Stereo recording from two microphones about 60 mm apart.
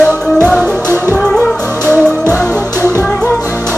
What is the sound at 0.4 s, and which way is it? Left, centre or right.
Music, right.